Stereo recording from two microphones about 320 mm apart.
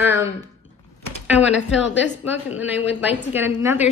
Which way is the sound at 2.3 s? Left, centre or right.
Centre.